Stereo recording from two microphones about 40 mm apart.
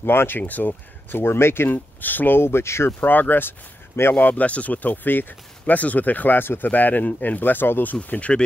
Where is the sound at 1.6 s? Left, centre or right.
Left.